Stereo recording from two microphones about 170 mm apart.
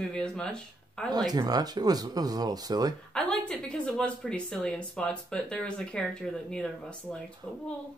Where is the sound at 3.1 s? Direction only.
5° left (ahead or behind).